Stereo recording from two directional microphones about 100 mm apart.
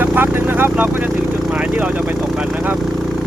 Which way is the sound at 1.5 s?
10° right (ahead or behind).